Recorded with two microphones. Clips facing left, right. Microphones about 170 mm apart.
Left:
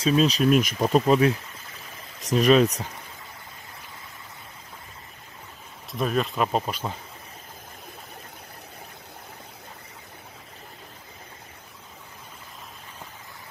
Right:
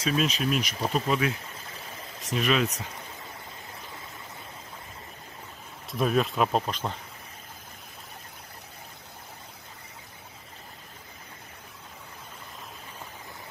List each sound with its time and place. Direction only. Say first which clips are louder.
0.0 s speech: left 6 dB; 30° left (ahead or behind)
0.5 s speech: left 8 dB; 50° left (ahead or behind)
5.9 s speech: even; centre (ahead or behind)